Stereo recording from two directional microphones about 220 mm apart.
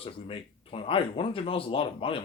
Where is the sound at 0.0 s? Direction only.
25° left (ahead or behind).